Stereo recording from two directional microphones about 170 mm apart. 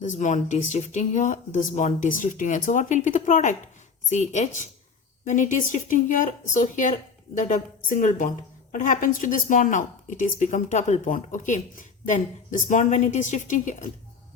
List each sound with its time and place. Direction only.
0.0 s speech: 45° left (ahead or behind)